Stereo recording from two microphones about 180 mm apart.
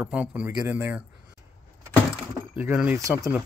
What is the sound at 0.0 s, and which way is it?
Speech, 5° right (ahead or behind).